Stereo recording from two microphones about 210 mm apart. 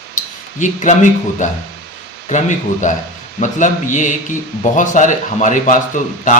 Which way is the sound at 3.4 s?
35° left (ahead or behind).